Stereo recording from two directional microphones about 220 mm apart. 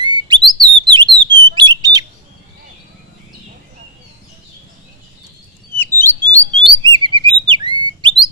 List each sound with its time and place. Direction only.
0.0 s bird: 20° right (ahead or behind)
1.2 s bird: 55° right (ahead or behind)
1.5 s bird: 20° right (ahead or behind)
5.8 s bird: 10° left (ahead or behind)
6.7 s bird: 20° right (ahead or behind)